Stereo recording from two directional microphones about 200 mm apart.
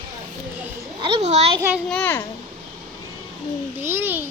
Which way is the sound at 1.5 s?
10° right (ahead or behind).